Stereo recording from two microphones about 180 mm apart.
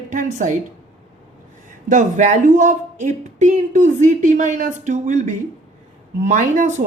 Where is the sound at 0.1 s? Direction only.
45° right (ahead or behind).